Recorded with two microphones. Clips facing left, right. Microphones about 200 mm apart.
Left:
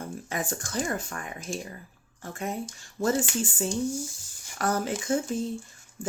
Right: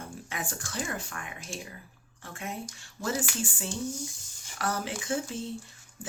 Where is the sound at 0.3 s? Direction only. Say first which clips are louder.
Left 6 dB; 45° left (ahead or behind).